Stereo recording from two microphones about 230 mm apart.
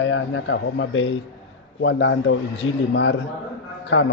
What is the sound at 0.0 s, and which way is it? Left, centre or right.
A man's voice, left.